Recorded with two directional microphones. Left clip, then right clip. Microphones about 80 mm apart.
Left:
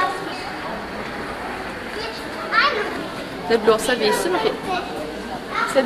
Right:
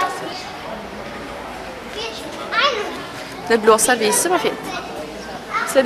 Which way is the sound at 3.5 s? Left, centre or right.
Right.